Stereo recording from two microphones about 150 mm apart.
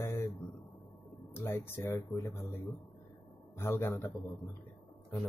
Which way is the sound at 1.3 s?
15° left (ahead or behind).